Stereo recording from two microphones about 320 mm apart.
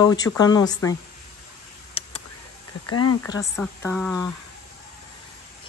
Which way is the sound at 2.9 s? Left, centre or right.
Left.